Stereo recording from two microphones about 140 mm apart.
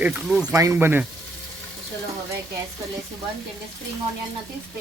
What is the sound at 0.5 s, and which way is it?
Speech, 20° right (ahead or behind).